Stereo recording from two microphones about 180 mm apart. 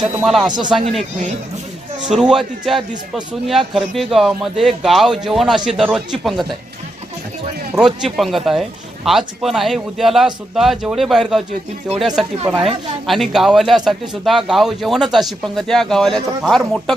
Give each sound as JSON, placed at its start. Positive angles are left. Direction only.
{"t": 0.1, "sound": "speech", "side_deg": -5}
{"t": 0.4, "sound": "speech", "side_deg": -25}
{"t": 0.7, "sound": "speech", "side_deg": 0}
{"t": 7.8, "sound": "speech", "side_deg": 0}